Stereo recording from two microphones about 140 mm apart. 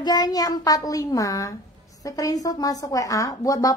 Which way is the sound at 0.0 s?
30° left (ahead or behind).